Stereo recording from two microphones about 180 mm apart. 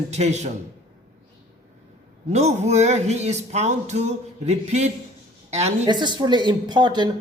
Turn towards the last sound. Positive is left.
turn(degrees=-25)  # may be behind; listen again after turning